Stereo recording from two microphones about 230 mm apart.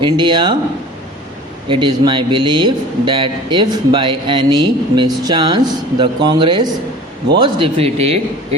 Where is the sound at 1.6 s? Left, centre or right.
Centre.